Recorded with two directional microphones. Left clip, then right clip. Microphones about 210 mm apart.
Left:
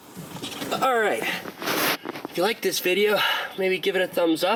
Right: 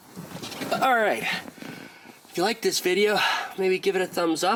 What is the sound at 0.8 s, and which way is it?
Speech, 20° right (ahead or behind).